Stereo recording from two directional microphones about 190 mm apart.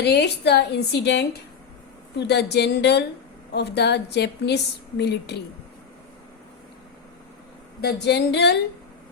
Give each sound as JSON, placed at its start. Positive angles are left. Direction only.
{"t": 0.0, "sound": "a woman's voice", "side_deg": 60}
{"t": 7.8, "sound": "a woman's voice", "side_deg": 60}